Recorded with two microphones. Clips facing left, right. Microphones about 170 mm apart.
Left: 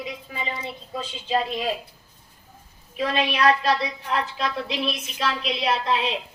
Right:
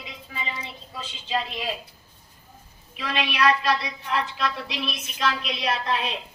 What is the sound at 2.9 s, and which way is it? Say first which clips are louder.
A woman's voice: left 4 dB; 40° left (ahead or behind).